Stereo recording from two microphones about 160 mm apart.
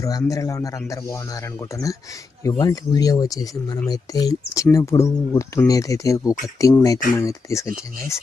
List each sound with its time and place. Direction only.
0.0 s speech: 20° left (ahead or behind)
2.5 s speech: 25° left (ahead or behind)